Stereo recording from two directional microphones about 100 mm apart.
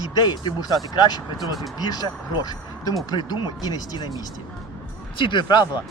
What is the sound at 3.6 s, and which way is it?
Speech, 40° left (ahead or behind).